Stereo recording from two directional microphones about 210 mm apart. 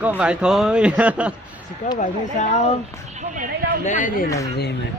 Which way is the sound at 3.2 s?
40° right (ahead or behind).